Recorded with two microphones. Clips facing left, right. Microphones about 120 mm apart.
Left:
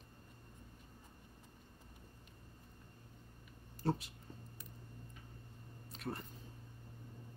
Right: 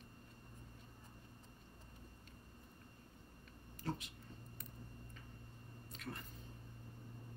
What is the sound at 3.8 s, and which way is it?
Speech, 35° left (ahead or behind).